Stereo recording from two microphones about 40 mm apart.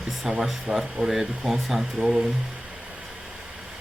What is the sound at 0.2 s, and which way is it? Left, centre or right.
Speech, centre.